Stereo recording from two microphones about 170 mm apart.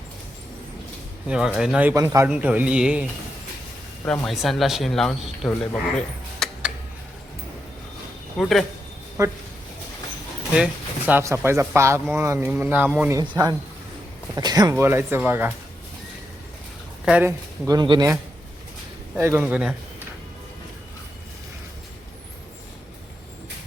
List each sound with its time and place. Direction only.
1.5 s speech: 5° right (ahead or behind)
4.0 s speech: 5° left (ahead or behind)
6.4 s a sound: 5° left (ahead or behind)
8.4 s speech: centre (ahead or behind)
9.2 s speech: 20° right (ahead or behind)
10.5 s speech: 5° right (ahead or behind)
13.1 s a man's voice: 25° right (ahead or behind)
17.1 s speech: 10° right (ahead or behind)
17.7 s a man's voice: 25° right (ahead or behind)
19.1 s speech: 15° right (ahead or behind)